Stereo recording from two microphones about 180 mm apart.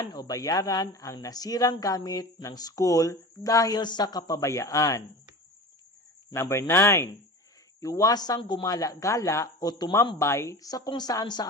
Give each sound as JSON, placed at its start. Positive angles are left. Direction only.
{"t": 0.0, "sound": "a man's voice", "side_deg": 20}
{"t": 6.3, "sound": "a man's voice", "side_deg": 15}